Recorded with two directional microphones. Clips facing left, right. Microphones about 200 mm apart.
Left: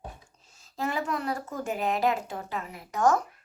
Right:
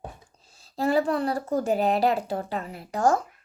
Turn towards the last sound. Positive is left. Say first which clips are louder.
# right 1 dB
turn(degrees=-30)  # may be behind; listen again after turning